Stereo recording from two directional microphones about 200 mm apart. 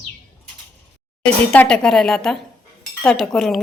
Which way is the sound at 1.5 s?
5° left (ahead or behind).